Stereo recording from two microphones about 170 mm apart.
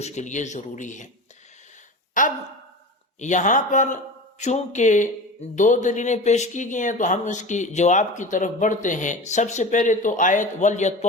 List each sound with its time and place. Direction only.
0.0 s a man's voice: 45° left (ahead or behind)
2.2 s a sound: 50° left (ahead or behind)
3.2 s a man's voice: 45° left (ahead or behind)